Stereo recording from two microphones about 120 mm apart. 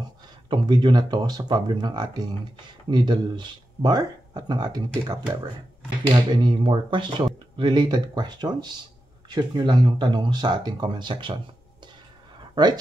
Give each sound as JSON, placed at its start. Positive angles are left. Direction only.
{"t": 0.5, "sound": "speech", "side_deg": -40}
{"t": 6.1, "sound": "speech", "side_deg": -40}
{"t": 12.6, "sound": "speech", "side_deg": -35}